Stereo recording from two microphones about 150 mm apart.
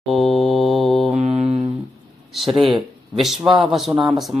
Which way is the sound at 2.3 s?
Centre (ahead or behind).